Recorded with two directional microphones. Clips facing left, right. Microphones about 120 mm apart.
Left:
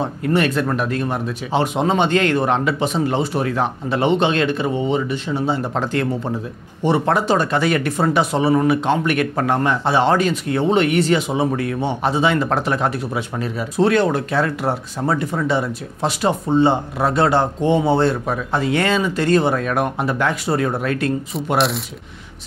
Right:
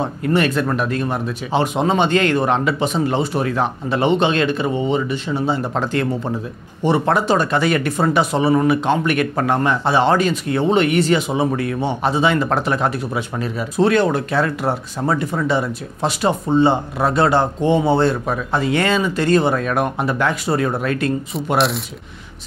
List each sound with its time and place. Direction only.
0.0 s speech: 20° right (ahead or behind)